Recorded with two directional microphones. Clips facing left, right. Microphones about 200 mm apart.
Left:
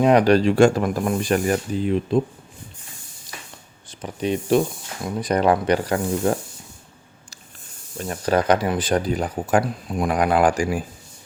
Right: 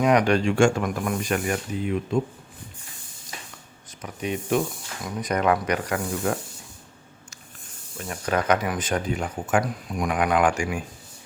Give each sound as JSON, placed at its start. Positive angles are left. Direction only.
{"t": 0.0, "sound": "speech", "side_deg": 30}
{"t": 3.8, "sound": "speech", "side_deg": 30}
{"t": 7.9, "sound": "speech", "side_deg": 35}